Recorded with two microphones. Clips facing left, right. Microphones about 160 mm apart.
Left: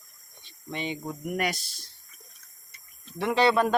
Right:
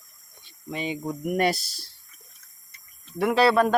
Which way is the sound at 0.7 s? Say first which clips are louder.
Right 3 dB; 10° right (ahead or behind).